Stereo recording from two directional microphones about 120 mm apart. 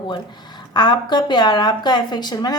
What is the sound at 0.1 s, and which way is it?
Speech, 35° left (ahead or behind).